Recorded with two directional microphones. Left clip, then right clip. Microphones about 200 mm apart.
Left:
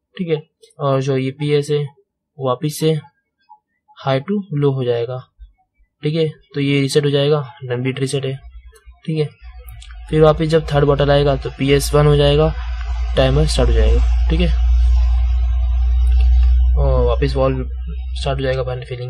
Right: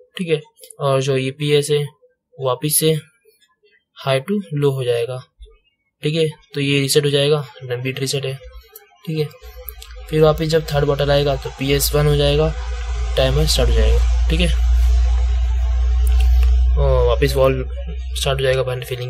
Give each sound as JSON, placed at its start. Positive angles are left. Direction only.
{"t": 0.2, "sound": "a man's voice", "side_deg": 5}
{"t": 16.7, "sound": "a sound", "side_deg": 0}
{"t": 18.1, "sound": "speech", "side_deg": 0}